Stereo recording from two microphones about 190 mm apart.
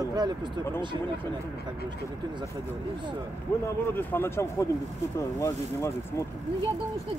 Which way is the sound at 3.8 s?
10° left (ahead or behind).